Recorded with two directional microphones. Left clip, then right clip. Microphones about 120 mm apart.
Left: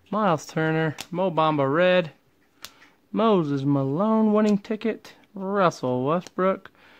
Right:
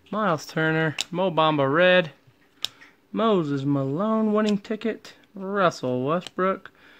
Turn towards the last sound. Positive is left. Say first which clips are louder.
# left 1 dB
turn(degrees=35)  # may be behind; listen again after turning